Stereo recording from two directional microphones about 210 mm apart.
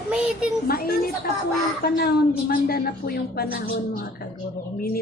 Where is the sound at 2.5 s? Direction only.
45° left (ahead or behind).